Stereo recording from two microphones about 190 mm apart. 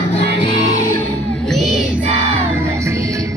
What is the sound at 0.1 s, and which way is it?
Music, 30° left (ahead or behind).